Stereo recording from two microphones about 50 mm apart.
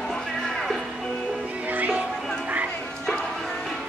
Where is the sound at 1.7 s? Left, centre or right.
Right.